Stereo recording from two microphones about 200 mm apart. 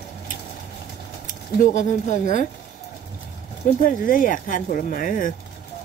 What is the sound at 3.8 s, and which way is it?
Speech, 45° left (ahead or behind).